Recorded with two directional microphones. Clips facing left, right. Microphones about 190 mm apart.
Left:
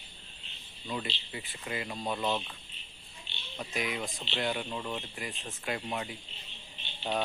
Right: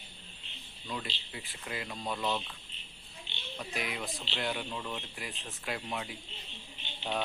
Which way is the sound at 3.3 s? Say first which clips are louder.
Left 2 dB; 15° right (ahead or behind).